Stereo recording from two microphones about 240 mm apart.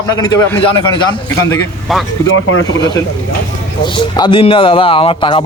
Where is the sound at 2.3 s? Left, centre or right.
Left.